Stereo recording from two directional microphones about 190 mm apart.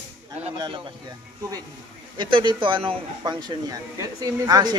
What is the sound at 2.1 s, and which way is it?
Speech, 25° right (ahead or behind).